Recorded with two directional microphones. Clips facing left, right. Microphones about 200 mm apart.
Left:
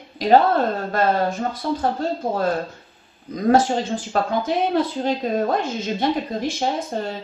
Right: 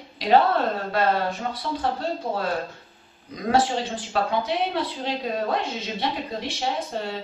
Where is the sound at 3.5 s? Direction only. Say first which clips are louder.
Left 5 dB; 45° left (ahead or behind).